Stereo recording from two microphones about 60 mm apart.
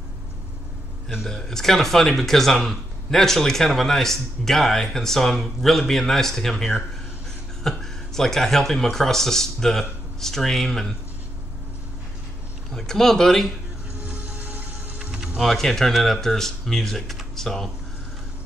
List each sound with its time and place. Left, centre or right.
1.2 s a man's voice: centre
12.7 s speech: centre
14.0 s music: right
15.3 s speech: centre